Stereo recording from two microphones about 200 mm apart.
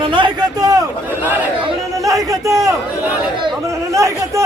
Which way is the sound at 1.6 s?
15° right (ahead or behind).